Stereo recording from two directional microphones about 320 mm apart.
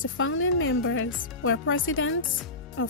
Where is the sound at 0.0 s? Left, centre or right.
Left.